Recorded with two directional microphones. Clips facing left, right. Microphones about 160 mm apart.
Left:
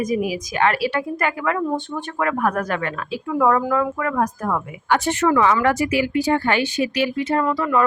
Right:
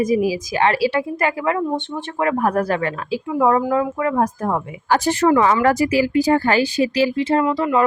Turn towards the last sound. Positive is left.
turn(degrees=-20)  # may be behind; listen again after turning